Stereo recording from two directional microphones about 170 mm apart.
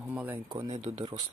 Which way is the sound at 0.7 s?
35° right (ahead or behind).